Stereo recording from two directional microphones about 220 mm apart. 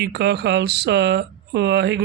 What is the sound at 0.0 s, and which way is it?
Speech, 50° right (ahead or behind).